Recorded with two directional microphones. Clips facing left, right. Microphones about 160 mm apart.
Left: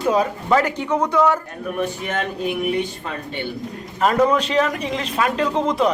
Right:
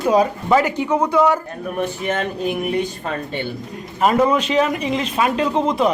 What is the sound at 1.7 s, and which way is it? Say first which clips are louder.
Speech: right 2 dB; 40° right (ahead or behind).